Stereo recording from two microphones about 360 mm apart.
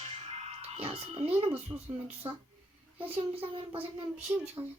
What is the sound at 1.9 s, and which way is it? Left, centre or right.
A child's voice, centre.